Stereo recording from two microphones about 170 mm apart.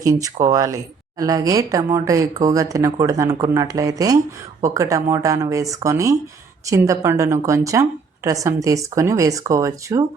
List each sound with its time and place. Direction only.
0.0 s a woman's voice: 20° right (ahead or behind)